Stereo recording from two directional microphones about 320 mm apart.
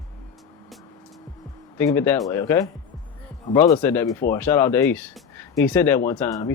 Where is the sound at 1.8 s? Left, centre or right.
Centre.